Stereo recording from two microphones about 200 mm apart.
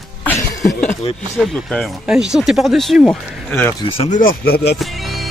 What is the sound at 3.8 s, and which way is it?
Speech, 30° left (ahead or behind).